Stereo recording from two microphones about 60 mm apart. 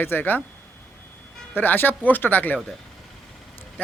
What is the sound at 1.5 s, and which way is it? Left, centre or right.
A man's voice, left.